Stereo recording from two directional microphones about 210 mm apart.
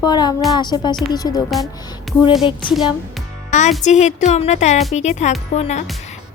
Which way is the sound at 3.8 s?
35° left (ahead or behind).